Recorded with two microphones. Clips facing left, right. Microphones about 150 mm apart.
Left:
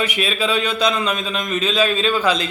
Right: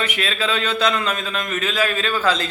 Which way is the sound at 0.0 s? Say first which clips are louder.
Left 3 dB; 15° left (ahead or behind).